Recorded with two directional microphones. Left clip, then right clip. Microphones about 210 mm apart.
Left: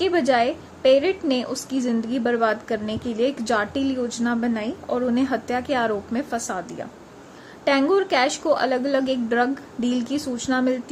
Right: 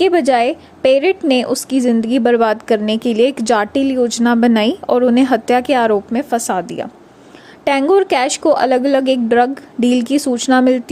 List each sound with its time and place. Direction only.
0.0 s a woman's voice: 35° right (ahead or behind)